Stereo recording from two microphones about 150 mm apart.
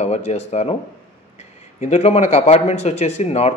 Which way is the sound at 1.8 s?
45° left (ahead or behind).